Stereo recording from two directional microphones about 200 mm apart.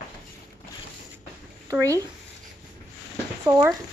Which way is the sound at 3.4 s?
15° right (ahead or behind).